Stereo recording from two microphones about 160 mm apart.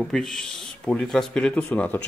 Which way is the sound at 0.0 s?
5° left (ahead or behind).